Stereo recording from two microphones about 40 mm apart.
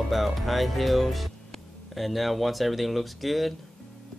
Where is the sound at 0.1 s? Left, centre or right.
Centre.